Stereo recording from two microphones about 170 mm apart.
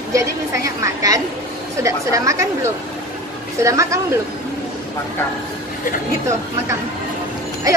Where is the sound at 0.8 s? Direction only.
20° right (ahead or behind).